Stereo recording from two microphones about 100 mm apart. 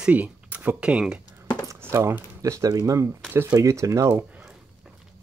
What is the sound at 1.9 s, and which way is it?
Speech, 30° right (ahead or behind).